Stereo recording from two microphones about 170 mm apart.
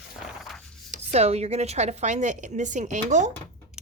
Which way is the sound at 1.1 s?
40° right (ahead or behind).